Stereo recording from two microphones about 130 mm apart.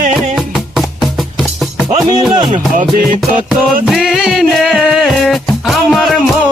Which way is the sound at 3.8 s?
Centre (ahead or behind).